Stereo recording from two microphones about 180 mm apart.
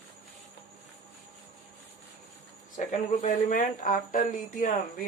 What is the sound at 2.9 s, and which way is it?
Speech, 45° left (ahead or behind).